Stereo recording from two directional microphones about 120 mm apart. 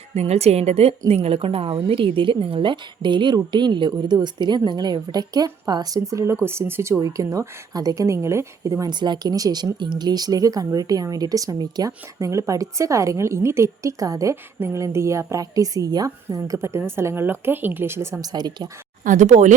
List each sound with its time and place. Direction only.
0.1 s a woman's voice: 60° right (ahead or behind); by 18.2 s 20° right (ahead or behind)
18.2 s speech: 35° right (ahead or behind)
19.0 s speech: 90° right